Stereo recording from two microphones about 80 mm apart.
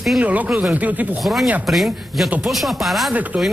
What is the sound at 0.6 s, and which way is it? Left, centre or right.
Speech, centre.